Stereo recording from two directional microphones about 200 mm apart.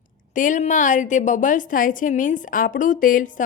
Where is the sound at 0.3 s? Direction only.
40° left (ahead or behind).